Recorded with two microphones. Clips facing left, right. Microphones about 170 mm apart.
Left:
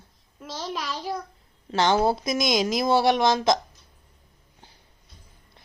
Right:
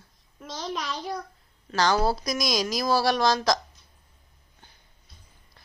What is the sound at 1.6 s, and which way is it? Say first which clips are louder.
A woman's voice: left 2 dB; 25° left (ahead or behind).